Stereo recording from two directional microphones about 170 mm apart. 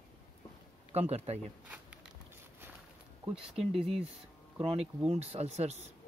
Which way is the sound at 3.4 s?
35° right (ahead or behind).